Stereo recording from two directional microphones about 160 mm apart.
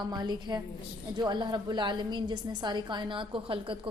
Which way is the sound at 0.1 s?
25° right (ahead or behind).